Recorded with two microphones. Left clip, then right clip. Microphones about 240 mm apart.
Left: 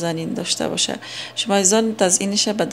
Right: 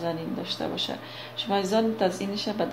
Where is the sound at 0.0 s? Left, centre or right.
Left.